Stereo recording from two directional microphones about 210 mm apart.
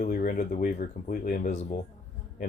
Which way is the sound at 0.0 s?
40° left (ahead or behind).